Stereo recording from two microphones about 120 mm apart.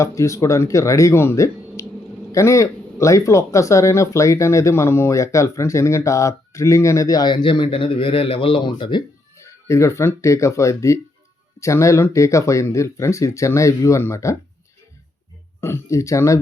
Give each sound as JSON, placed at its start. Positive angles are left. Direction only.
{"t": 0.0, "sound": "speech", "side_deg": 25}
{"t": 9.3, "sound": "speech", "side_deg": 25}
{"t": 15.6, "sound": "speech", "side_deg": 25}